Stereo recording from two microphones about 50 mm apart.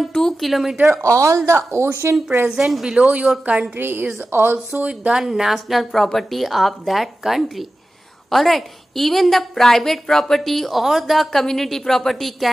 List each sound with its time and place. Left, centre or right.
0.4 s a woman's voice: centre
1.0 s a woman's voice: right
1.7 s speech: right
2.5 s a woman's voice: centre
3.0 s speech: right
3.7 s speech: right
5.1 s a woman's voice: centre